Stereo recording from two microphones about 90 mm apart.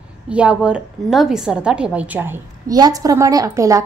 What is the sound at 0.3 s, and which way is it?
A woman's voice, 15° right (ahead or behind).